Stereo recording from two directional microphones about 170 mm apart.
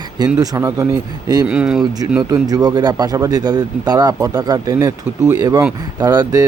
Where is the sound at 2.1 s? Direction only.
20° right (ahead or behind).